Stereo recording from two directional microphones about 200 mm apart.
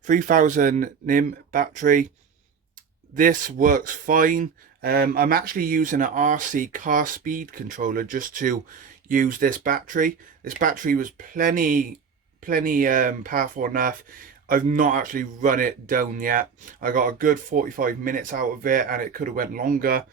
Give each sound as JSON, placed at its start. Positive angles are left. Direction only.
{"t": 0.0, "sound": "speech", "side_deg": -40}
{"t": 3.2, "sound": "speech", "side_deg": -45}